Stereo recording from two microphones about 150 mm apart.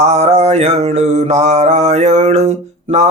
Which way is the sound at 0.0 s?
50° right (ahead or behind).